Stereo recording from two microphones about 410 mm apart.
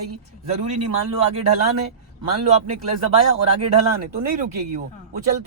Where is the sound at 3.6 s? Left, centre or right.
Right.